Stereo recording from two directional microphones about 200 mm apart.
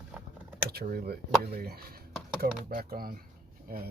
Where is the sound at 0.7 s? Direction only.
50° right (ahead or behind).